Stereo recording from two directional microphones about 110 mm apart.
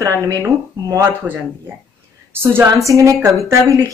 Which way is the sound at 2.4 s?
25° right (ahead or behind).